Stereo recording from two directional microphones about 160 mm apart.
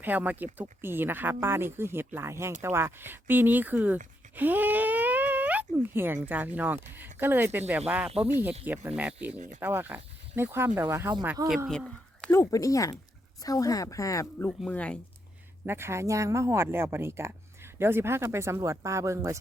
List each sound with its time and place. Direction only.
0.0 s speech: 10° right (ahead or behind)
4.4 s a sound: 10° right (ahead or behind)
6.2 s speech: 10° right (ahead or behind)
11.7 s a sound: 5° left (ahead or behind)
12.3 s speech: 20° left (ahead or behind)
14.7 s speech: 10° left (ahead or behind)
15.6 s speech: 15° right (ahead or behind)